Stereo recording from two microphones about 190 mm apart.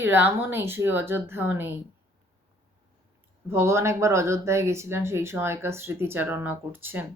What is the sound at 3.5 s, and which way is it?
Speech, 15° right (ahead or behind).